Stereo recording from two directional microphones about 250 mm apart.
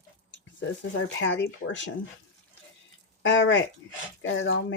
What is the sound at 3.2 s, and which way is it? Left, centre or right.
Speech, left.